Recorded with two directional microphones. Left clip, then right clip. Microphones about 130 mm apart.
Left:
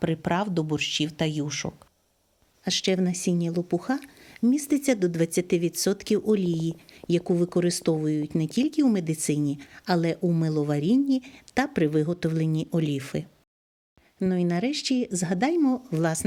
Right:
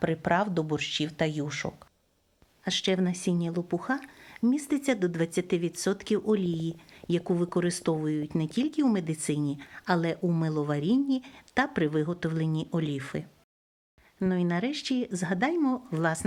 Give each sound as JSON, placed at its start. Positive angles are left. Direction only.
{"t": 0.0, "sound": "speech", "side_deg": 35}